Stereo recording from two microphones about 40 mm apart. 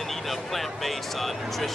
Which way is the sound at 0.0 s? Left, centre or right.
Centre.